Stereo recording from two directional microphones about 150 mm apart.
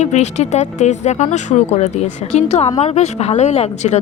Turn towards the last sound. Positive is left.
turn(degrees=50)  # may be behind; listen again after turning